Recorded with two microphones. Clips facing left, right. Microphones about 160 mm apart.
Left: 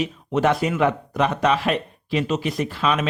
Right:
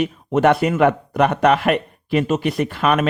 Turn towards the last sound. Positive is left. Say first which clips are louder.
# right 4 dB
turn(degrees=-55)  # may be behind; listen again after turning